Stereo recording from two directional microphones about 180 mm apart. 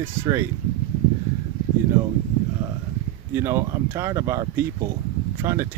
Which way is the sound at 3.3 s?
15° right (ahead or behind).